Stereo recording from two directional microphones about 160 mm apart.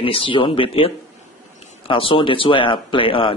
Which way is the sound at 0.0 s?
35° left (ahead or behind).